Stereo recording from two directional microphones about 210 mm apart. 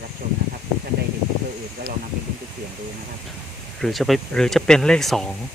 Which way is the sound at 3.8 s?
Centre (ahead or behind).